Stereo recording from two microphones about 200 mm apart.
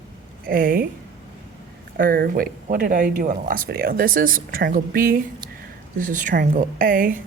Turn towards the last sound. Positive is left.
turn(degrees=-45)  # may be behind; listen again after turning